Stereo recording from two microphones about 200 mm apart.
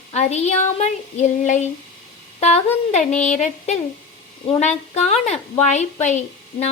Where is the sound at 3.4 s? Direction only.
35° left (ahead or behind).